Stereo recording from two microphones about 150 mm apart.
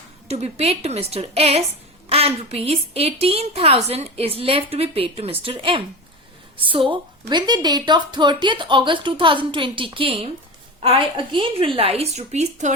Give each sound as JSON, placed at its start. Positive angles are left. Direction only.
{"t": 0.3, "sound": "a woman's voice", "side_deg": -45}